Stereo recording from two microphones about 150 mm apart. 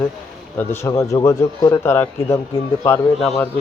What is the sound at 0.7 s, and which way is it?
A man's voice, 20° left (ahead or behind).